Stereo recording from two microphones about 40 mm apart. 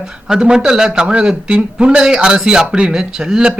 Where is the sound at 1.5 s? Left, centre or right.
Right.